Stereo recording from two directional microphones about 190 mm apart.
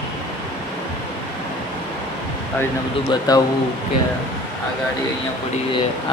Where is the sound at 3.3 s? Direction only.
20° left (ahead or behind).